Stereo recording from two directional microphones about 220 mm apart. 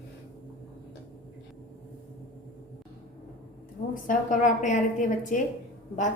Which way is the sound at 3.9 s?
35° left (ahead or behind).